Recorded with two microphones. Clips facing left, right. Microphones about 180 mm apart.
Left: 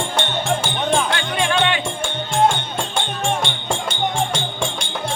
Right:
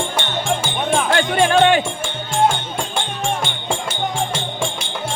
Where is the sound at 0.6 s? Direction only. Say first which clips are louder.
Even; 5° right (ahead or behind).